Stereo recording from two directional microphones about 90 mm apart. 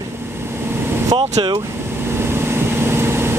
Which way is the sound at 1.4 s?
70° right (ahead or behind).